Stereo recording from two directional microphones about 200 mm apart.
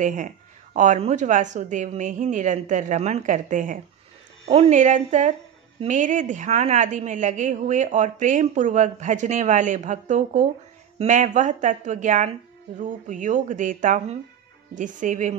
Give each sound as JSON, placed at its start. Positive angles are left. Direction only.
{"t": 0.0, "sound": "a woman's voice", "side_deg": -40}